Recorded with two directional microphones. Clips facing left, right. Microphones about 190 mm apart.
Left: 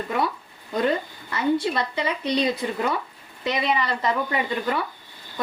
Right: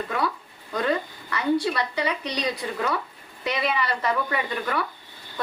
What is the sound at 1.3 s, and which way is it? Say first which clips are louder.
Speech: left 1 dB; 25° left (ahead or behind).